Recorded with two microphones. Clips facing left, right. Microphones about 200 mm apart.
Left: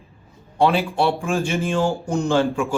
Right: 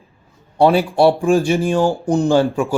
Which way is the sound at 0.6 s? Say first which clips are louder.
Right 6 dB; 40° right (ahead or behind).